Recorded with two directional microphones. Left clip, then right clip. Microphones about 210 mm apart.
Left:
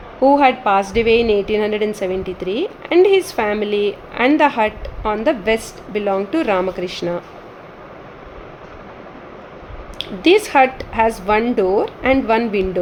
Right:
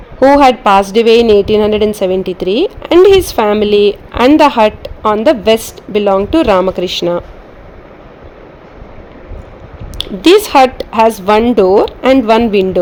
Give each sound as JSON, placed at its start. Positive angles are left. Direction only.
{"t": 0.2, "sound": "a woman's voice", "side_deg": -40}
{"t": 10.0, "sound": "a woman's voice", "side_deg": -40}